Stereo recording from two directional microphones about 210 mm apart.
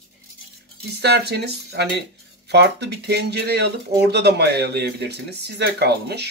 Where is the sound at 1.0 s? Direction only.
50° right (ahead or behind).